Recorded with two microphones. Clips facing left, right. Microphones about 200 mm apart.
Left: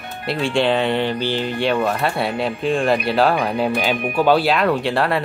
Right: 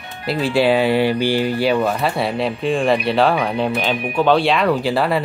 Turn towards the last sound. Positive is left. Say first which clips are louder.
# right 1 dB
turn(degrees=0)  # may be behind; listen again after turning